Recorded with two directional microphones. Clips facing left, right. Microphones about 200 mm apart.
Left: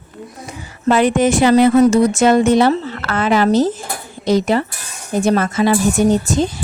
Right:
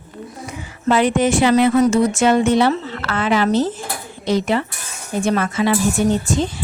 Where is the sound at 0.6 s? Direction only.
45° left (ahead or behind).